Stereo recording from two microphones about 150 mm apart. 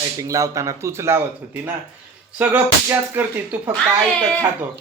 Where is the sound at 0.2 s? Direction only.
20° right (ahead or behind).